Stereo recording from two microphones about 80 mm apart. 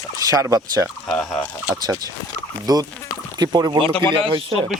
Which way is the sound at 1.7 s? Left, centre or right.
Right.